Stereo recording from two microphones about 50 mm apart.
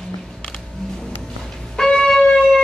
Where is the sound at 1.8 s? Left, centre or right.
Centre.